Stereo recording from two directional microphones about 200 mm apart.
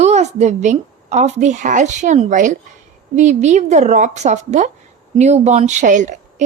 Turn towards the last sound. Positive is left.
turn(degrees=-40)  # may be behind; listen again after turning